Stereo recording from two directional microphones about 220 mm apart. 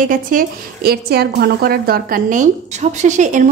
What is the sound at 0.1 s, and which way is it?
A woman's voice, 40° right (ahead or behind).